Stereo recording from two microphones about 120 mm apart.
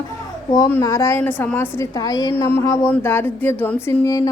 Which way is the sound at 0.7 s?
25° left (ahead or behind).